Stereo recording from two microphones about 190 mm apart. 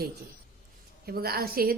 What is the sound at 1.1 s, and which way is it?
Speech, 55° right (ahead or behind).